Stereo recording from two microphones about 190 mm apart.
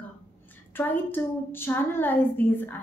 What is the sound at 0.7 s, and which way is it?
A woman's voice, 10° left (ahead or behind).